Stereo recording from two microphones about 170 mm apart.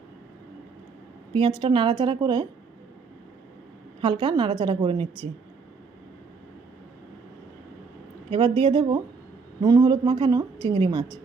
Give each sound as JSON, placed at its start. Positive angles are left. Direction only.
{"t": 1.3, "sound": "a woman's voice", "side_deg": -30}
{"t": 4.0, "sound": "a woman's voice", "side_deg": -30}
{"t": 8.3, "sound": "a woman's voice", "side_deg": -30}